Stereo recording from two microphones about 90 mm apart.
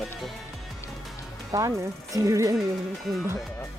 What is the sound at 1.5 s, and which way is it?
Ratchet, 35° right (ahead or behind).